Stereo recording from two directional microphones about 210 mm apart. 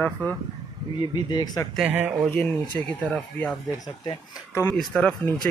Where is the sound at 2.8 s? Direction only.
5° left (ahead or behind).